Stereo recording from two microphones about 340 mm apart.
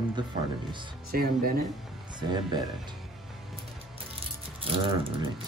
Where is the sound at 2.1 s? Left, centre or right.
Centre.